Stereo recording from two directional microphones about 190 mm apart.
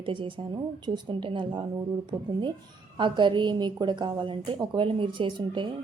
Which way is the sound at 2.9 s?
25° right (ahead or behind).